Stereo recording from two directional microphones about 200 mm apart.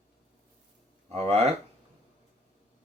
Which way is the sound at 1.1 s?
30° right (ahead or behind).